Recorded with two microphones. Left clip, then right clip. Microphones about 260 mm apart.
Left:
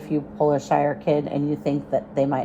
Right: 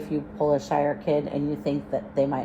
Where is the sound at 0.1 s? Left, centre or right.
Left.